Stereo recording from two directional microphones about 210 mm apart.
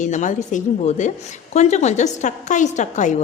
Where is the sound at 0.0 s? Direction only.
35° left (ahead or behind).